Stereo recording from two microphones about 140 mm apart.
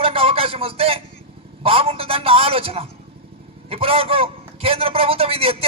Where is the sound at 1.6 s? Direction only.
45° right (ahead or behind).